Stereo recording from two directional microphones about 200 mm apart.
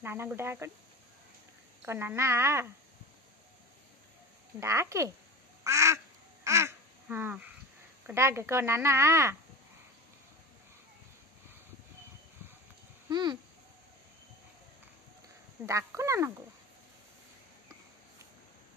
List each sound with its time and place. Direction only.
0.0 s speech: 10° right (ahead or behind)
1.8 s speech: 10° right (ahead or behind)
4.6 s speech: 15° right (ahead or behind)
5.6 s duck: 15° right (ahead or behind)
8.1 s speech: 15° right (ahead or behind)
13.1 s speech: 20° right (ahead or behind)
15.6 s speech: 15° right (ahead or behind)